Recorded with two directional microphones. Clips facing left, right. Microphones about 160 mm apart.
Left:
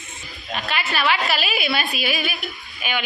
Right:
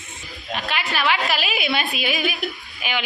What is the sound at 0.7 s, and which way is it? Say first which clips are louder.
A woman's voice: left 1 dB; 15° right (ahead or behind).